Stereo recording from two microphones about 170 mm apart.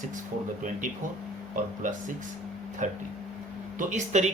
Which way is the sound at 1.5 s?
50° right (ahead or behind).